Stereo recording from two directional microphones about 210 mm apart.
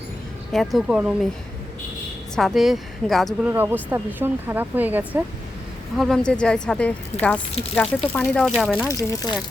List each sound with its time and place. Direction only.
0.5 s a woman's voice: centre (ahead or behind)
2.3 s a woman's voice: centre (ahead or behind)
3.5 s speech: 10° right (ahead or behind)
6.0 s a woman's voice: 5° left (ahead or behind)
8.9 s speech: 15° left (ahead or behind)